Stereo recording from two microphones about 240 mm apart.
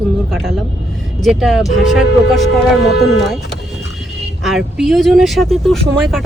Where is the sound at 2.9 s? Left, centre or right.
Left.